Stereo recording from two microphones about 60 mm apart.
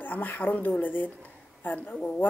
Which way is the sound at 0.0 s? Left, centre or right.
Left.